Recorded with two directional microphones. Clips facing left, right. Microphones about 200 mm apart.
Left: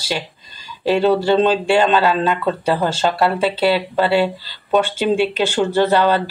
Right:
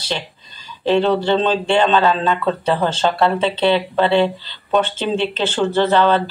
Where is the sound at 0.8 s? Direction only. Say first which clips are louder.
Left 1 dB; 10° left (ahead or behind).